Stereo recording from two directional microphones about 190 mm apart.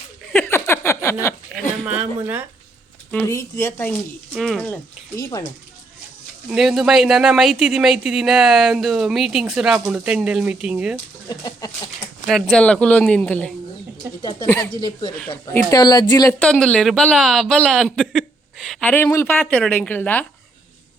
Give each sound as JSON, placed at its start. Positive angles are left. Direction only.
{"t": 0.3, "sound": "a sound", "side_deg": 10}
{"t": 1.2, "sound": "chuckle", "side_deg": 15}
{"t": 1.8, "sound": "speech", "side_deg": -10}
{"t": 3.1, "sound": "speech", "side_deg": 10}
{"t": 6.5, "sound": "speech", "side_deg": 0}
{"t": 11.3, "sound": "speech", "side_deg": 20}
{"t": 12.2, "sound": "speech", "side_deg": 0}
{"t": 14.2, "sound": "speech", "side_deg": 25}
{"t": 16.4, "sound": "speech", "side_deg": 5}